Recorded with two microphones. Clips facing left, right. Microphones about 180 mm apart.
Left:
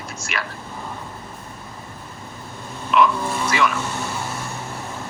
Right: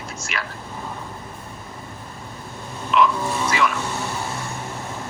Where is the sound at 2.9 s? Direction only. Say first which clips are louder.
Left 1 dB; 55° left (ahead or behind).